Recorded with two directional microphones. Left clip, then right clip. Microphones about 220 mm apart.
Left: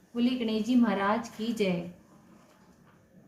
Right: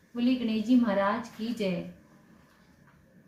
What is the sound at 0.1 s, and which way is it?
A woman's voice, 35° left (ahead or behind).